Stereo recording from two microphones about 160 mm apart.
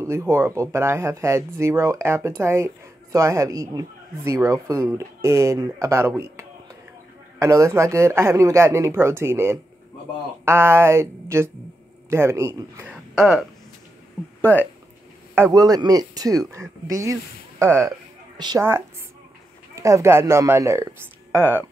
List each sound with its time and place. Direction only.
0.0 s speech: 15° right (ahead or behind)
13.1 s speech: 5° right (ahead or behind)
15.3 s speech: 20° right (ahead or behind)
19.7 s speech: 20° right (ahead or behind)